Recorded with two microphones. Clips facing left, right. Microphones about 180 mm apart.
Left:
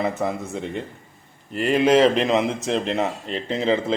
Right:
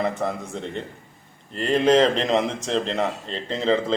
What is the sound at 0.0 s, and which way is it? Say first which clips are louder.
Speech: left 1 dB; 5° left (ahead or behind).